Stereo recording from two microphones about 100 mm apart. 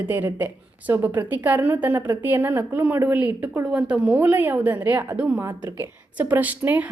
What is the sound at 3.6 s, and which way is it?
A woman's voice, 5° right (ahead or behind).